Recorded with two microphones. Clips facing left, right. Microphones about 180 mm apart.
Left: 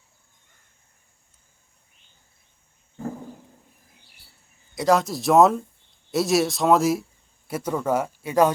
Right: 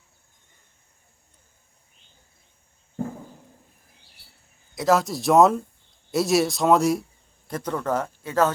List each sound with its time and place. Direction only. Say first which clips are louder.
4.7 s speech: left 1 dB; centre (ahead or behind)